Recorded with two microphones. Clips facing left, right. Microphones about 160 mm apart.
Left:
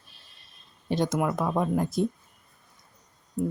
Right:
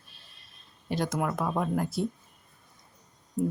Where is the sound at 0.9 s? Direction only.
20° left (ahead or behind).